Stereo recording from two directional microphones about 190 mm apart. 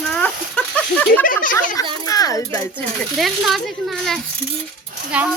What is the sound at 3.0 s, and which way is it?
Speech, centre (ahead or behind).